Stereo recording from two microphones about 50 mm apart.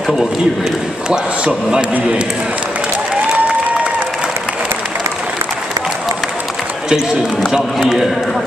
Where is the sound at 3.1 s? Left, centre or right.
Right.